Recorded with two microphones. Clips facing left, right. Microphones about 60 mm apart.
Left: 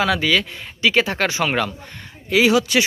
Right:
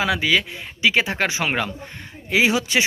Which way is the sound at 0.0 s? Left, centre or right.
Centre.